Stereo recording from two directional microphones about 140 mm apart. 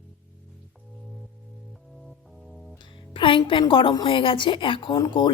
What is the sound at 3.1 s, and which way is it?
A woman's voice, 35° left (ahead or behind).